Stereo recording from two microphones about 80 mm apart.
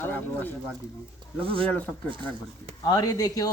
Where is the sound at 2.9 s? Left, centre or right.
Left.